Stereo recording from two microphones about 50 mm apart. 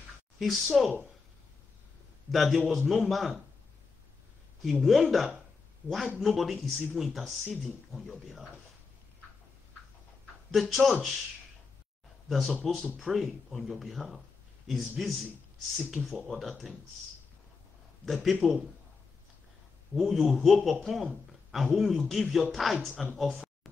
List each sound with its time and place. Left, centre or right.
0.4 s speech: centre
2.3 s speech: centre
4.6 s speech: centre
5.8 s speech: right
6.1 s speech: centre
10.5 s speech: centre
12.3 s speech: centre
18.0 s speech: centre
19.9 s speech: centre